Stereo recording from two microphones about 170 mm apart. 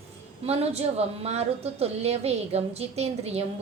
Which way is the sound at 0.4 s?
35° right (ahead or behind).